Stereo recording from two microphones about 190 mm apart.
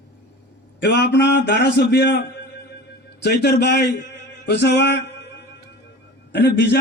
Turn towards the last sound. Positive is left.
turn(degrees=65)  # may be behind; listen again after turning